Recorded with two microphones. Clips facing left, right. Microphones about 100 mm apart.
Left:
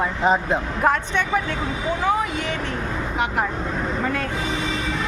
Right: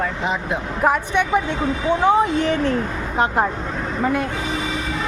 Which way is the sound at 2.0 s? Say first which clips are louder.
Right 7 dB; 30° right (ahead or behind).